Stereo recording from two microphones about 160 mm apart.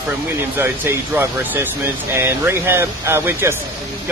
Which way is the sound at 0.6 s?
15° right (ahead or behind).